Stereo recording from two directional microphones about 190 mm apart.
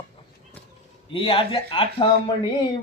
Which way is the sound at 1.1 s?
30° left (ahead or behind).